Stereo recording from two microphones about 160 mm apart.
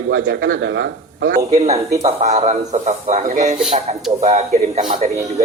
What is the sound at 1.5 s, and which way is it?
A man's voice, 45° right (ahead or behind).